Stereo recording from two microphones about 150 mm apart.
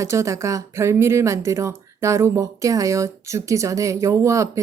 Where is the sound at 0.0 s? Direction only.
20° right (ahead or behind).